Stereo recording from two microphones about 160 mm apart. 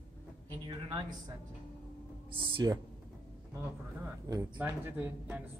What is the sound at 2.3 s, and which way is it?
Speech, 25° right (ahead or behind).